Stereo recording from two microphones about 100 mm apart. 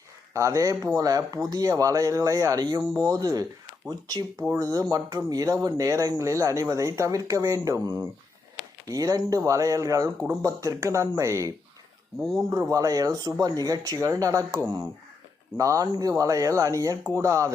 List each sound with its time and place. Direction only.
0.3 s speech: 30° right (ahead or behind)
12.2 s speech: centre (ahead or behind)
12.5 s speech: 35° right (ahead or behind)